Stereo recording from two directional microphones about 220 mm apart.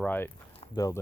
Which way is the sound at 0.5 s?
20° left (ahead or behind).